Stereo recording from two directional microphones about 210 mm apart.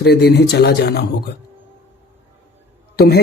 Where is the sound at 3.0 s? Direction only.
50° left (ahead or behind).